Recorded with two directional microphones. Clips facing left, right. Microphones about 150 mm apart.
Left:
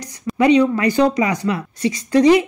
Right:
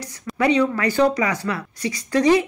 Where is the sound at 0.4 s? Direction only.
20° left (ahead or behind).